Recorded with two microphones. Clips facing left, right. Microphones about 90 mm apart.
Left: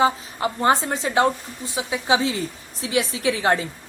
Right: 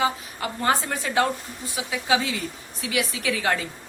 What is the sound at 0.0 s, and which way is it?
Speech, 25° left (ahead or behind).